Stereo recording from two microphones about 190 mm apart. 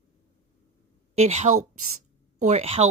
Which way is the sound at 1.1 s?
35° right (ahead or behind).